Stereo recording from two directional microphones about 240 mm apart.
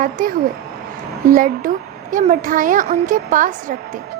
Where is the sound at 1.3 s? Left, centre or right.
Right.